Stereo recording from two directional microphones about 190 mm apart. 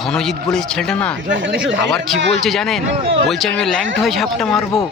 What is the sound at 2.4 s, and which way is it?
Speech, centre (ahead or behind).